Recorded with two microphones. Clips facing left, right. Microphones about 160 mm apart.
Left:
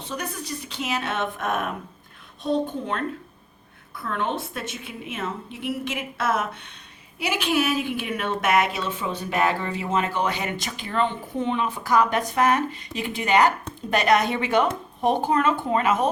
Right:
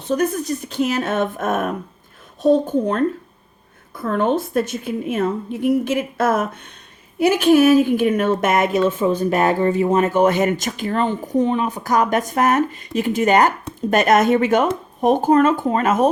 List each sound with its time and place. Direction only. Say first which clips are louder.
0.1 s speech: right 13 dB; 45° right (ahead or behind)